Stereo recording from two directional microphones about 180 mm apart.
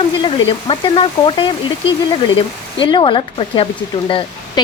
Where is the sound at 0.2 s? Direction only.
30° left (ahead or behind).